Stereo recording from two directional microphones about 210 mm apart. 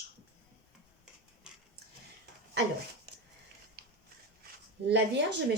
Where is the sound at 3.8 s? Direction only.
45° right (ahead or behind).